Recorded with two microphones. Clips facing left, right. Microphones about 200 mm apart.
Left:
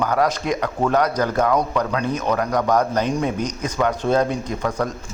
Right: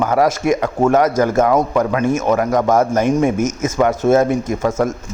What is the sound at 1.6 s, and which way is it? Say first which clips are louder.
Speech: right 5 dB; 25° right (ahead or behind).